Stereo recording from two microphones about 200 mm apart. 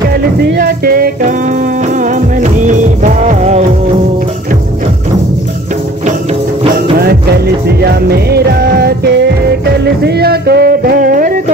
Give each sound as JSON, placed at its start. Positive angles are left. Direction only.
{"t": 0.1, "sound": "music", "side_deg": -50}
{"t": 7.6, "sound": "music", "side_deg": -50}